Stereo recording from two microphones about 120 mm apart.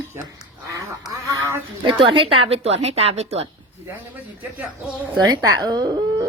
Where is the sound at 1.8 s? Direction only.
45° right (ahead or behind); by 3.4 s 60° right (ahead or behind).